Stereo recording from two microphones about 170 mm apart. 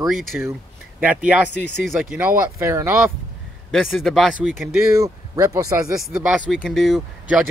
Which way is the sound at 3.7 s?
Centre (ahead or behind).